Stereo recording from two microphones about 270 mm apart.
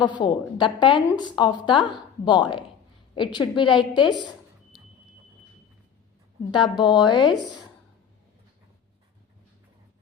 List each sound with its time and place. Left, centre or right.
0.0 s a woman's voice: centre
6.5 s a woman's voice: centre